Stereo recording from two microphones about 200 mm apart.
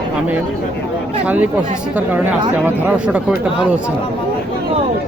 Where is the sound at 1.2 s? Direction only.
5° right (ahead or behind).